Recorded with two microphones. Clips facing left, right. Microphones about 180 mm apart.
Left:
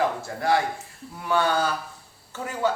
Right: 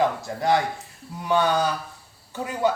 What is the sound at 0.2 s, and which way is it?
Speech, 20° right (ahead or behind).